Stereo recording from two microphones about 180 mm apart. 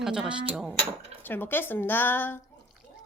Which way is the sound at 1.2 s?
10° left (ahead or behind).